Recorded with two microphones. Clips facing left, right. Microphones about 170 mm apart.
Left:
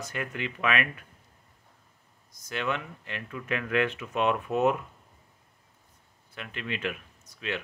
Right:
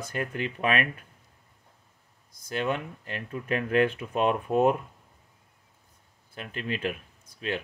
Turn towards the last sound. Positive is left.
turn(degrees=-40)  # may be behind; listen again after turning